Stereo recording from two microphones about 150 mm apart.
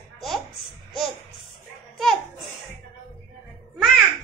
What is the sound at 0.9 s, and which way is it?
Babbling, centre (ahead or behind).